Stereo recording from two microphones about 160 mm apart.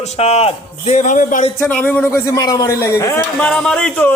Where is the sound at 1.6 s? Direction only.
10° left (ahead or behind).